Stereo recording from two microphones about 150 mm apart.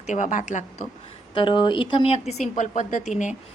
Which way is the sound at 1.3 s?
35° left (ahead or behind).